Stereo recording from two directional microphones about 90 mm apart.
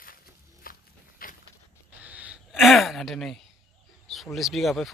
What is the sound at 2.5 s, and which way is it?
Speech, centre (ahead or behind).